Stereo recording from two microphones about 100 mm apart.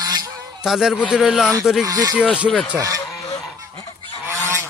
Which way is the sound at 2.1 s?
10° right (ahead or behind).